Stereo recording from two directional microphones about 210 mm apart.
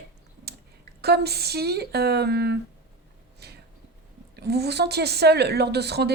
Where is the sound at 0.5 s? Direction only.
50° right (ahead or behind).